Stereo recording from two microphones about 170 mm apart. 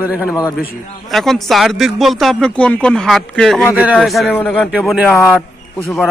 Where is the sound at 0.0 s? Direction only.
5° right (ahead or behind).